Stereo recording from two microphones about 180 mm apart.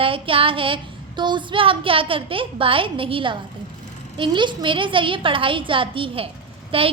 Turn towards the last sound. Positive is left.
turn(degrees=-30)  # may be behind; listen again after turning